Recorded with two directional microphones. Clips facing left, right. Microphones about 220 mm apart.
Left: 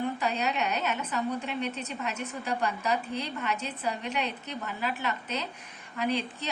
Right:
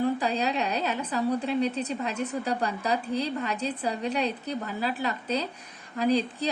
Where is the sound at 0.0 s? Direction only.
30° right (ahead or behind).